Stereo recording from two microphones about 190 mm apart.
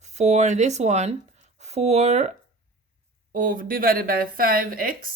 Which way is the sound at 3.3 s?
45° right (ahead or behind).